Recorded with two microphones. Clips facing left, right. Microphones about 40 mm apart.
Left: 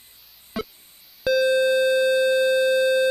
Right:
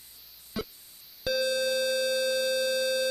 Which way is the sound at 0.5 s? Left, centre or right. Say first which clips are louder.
Left 5 dB; centre.